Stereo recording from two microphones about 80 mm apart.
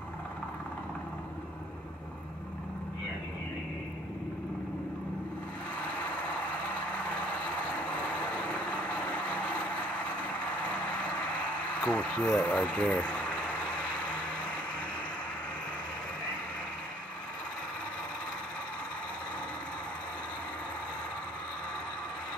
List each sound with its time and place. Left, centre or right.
8.5 s vehicle: centre
11.8 s speech: centre